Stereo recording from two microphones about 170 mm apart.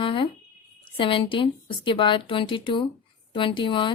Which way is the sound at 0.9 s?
30° left (ahead or behind).